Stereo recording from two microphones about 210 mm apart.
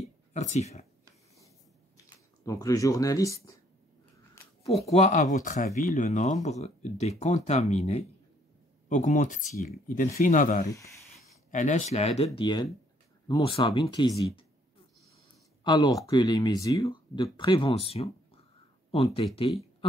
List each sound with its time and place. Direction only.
0.0 s a sound: 35° left (ahead or behind)
2.4 s speech: 15° left (ahead or behind)
4.6 s speech: centre (ahead or behind)
4.9 s speech: 35° left (ahead or behind)
12.4 s speech: 20° left (ahead or behind)
15.6 s speech: 20° left (ahead or behind)